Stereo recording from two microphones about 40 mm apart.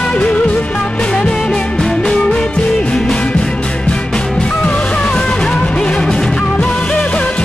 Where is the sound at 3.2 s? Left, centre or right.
Left.